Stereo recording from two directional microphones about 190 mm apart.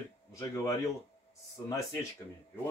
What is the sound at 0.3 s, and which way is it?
Speech, 15° left (ahead or behind).